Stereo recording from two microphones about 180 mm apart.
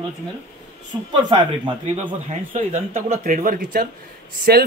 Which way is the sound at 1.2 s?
25° right (ahead or behind).